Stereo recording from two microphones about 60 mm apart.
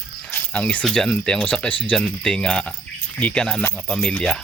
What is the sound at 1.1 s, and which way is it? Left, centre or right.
Speech, centre.